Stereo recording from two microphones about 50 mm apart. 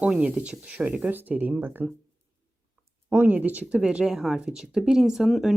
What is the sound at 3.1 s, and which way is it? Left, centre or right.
Speech, right.